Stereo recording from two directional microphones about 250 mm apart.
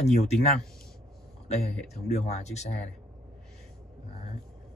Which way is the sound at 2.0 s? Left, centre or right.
Left.